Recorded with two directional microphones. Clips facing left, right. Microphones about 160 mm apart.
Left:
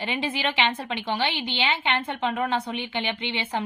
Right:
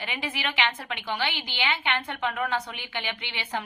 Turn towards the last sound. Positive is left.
turn(degrees=25)  # may be behind; listen again after turning